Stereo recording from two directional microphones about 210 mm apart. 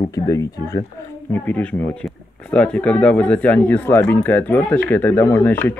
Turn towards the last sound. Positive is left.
turn(degrees=10)  # may be behind; listen again after turning